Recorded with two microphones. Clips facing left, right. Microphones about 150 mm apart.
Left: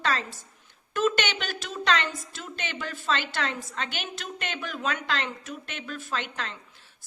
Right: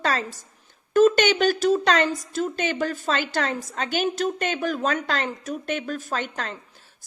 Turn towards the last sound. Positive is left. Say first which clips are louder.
# right 4 dB
turn(degrees=-40)  # may be behind; listen again after turning